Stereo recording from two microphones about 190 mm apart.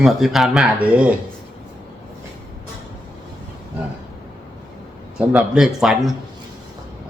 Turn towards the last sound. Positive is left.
turn(degrees=0)  # may be behind; listen again after turning